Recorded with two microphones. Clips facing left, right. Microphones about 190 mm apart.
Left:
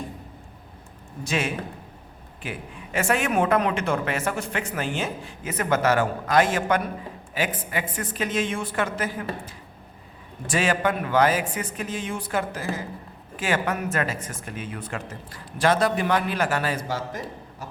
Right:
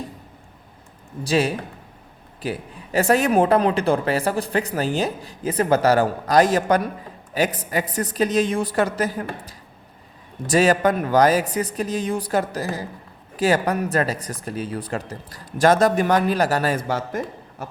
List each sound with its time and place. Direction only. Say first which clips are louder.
1.2 s speech: right 6 dB; 35° right (ahead or behind)
16.7 s a man's voice: right 4 dB; 55° right (ahead or behind)